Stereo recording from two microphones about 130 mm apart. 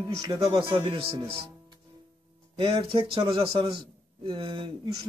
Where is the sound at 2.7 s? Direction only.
45° right (ahead or behind).